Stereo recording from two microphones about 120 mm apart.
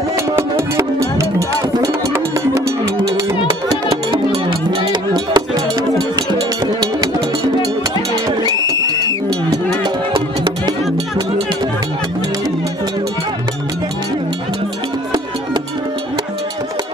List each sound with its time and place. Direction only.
0.4 s music: 25° right (ahead or behind)
4.3 s music: 45° right (ahead or behind)
8.5 s music: 30° left (ahead or behind)